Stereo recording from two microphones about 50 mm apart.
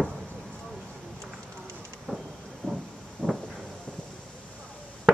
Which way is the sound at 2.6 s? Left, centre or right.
Centre.